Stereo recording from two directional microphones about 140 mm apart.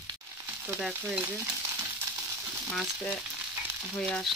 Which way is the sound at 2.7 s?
5° left (ahead or behind).